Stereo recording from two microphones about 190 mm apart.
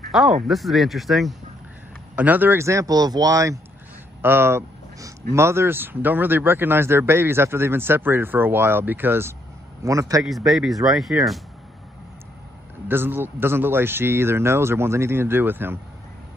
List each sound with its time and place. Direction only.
0.1 s speech: centre (ahead or behind); by 3.5 s 15° right (ahead or behind)
4.2 s a sound: 10° right (ahead or behind)
5.3 s speech: 15° right (ahead or behind)
10.2 s speech: centre (ahead or behind)
12.8 s speech: 10° right (ahead or behind)